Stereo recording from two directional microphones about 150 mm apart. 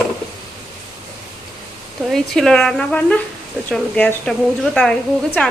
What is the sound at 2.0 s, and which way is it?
Speech, centre (ahead or behind).